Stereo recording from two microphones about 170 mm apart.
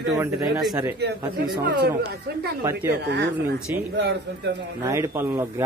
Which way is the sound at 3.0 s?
80° right.